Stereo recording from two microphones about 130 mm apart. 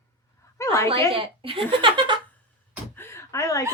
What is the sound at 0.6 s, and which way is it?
Speech, 20° left (ahead or behind).